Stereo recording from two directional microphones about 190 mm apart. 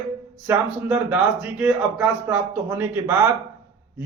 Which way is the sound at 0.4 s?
10° right (ahead or behind).